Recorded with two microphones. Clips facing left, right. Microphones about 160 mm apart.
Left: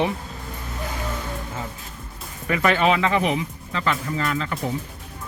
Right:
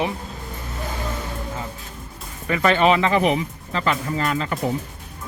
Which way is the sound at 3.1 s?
35° right (ahead or behind).